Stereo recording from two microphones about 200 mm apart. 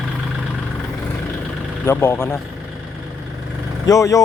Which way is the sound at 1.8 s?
10° left (ahead or behind).